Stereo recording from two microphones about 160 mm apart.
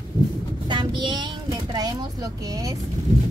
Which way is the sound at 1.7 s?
25° right (ahead or behind).